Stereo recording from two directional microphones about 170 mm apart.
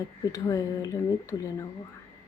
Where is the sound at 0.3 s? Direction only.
20° left (ahead or behind).